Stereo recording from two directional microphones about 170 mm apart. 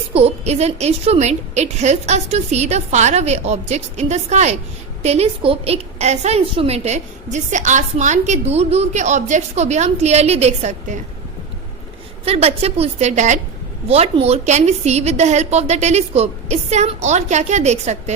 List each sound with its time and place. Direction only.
0.1 s a woman's voice: 35° right (ahead or behind)
12.2 s a woman's voice: 35° right (ahead or behind)